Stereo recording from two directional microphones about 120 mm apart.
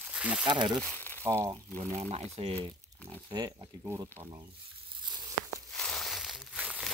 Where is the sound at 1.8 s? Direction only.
65° right (ahead or behind).